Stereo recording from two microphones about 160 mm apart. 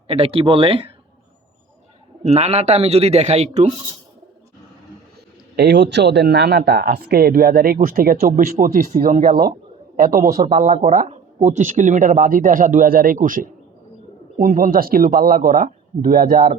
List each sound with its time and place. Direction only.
0.1 s speech: 35° right (ahead or behind)
2.2 s speech: 40° right (ahead or behind)
5.5 s speech: 90° right; by 10.2 s 60° right (ahead or behind)
10.6 s speech: 50° right (ahead or behind); by 16.6 s 65° right (ahead or behind)